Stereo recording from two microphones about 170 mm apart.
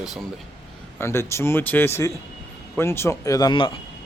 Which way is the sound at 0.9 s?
15° left (ahead or behind).